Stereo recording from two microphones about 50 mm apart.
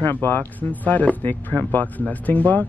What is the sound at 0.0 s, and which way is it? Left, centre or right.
Speech, left.